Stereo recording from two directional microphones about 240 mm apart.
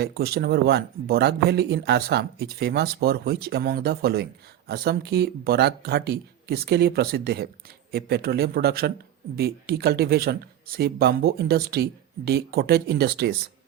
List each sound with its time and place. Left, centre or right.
0.0 s speech: right